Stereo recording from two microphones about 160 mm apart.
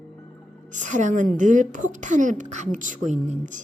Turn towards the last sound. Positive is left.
turn(degrees=-45)  # may be behind; listen again after turning